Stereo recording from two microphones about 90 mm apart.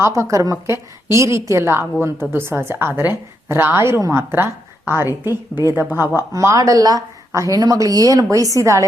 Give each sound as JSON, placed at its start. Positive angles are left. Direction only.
{"t": 0.0, "sound": "a woman's voice", "side_deg": -35}
{"t": 5.3, "sound": "a woman's voice", "side_deg": 35}
{"t": 5.9, "sound": "a woman's voice", "side_deg": -25}
{"t": 6.3, "sound": "a woman's voice", "side_deg": -40}